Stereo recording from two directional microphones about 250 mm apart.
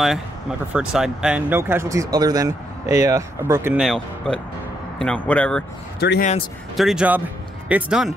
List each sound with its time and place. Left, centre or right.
0.7 s speech: centre
5.9 s a man's voice: left
6.8 s speech: centre